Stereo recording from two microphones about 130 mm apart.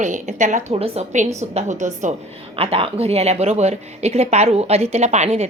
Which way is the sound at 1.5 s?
65° right (ahead or behind).